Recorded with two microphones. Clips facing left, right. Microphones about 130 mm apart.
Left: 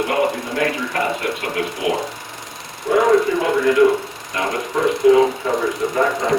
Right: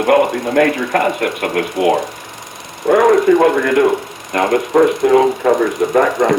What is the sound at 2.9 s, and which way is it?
Speech, 60° right (ahead or behind).